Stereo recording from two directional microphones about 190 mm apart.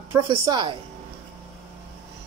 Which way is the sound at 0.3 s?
25° right (ahead or behind).